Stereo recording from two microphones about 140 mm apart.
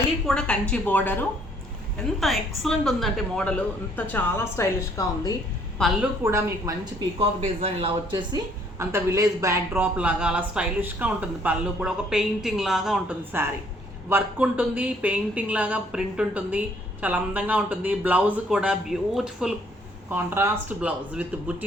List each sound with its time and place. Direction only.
0.3 s speech: 5° left (ahead or behind)
2.0 s speech: centre (ahead or behind); by 5.4 s 25° left (ahead or behind)
6.2 s speech: 20° right (ahead or behind)
7.2 s speech: 45° right (ahead or behind)
8.8 s a woman's voice: 20° right (ahead or behind)
20.1 s a woman's voice: 15° right (ahead or behind)